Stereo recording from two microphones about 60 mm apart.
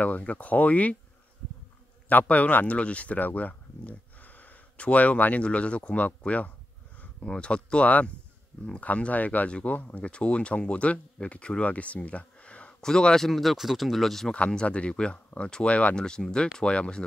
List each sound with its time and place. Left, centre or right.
0.0 s speech: left
2.0 s speech: left
12.8 s speech: centre
14.3 s speech: centre